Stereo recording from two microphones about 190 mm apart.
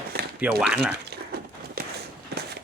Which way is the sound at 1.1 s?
55° right (ahead or behind).